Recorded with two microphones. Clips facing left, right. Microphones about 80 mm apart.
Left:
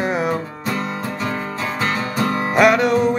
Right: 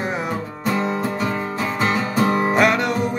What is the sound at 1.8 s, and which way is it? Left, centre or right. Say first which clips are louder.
Music: right 2 dB; centre.